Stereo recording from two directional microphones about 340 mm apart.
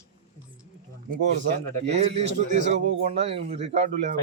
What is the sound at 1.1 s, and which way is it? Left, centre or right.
A man's voice, right.